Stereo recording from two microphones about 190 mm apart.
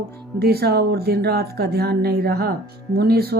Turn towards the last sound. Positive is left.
turn(degrees=-55)  # may be behind; listen again after turning